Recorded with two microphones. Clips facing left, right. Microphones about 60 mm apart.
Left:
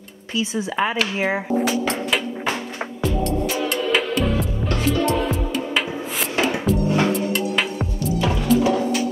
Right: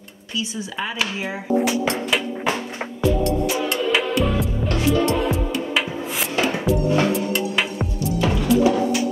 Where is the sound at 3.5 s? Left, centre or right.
Centre.